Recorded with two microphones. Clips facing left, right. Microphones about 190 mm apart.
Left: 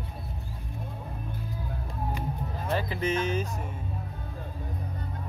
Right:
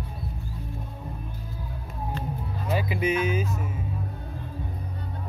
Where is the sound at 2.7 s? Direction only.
10° right (ahead or behind).